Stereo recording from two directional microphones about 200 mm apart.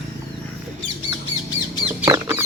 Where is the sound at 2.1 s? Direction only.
15° right (ahead or behind).